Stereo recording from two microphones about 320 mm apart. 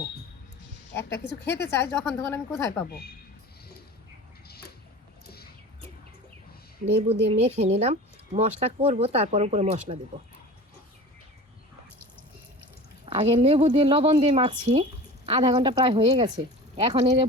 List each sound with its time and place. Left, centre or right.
0.9 s a woman's voice: centre
4.4 s a sound: left
7.1 s speech: centre
13.1 s speech: centre